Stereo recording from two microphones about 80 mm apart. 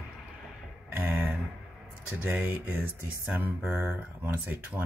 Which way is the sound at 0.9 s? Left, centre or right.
Right.